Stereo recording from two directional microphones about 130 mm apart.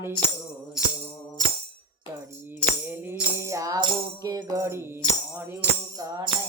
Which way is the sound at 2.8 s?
15° right (ahead or behind).